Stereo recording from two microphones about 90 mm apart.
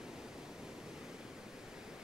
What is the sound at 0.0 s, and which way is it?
Pink noise, 5° right (ahead or behind).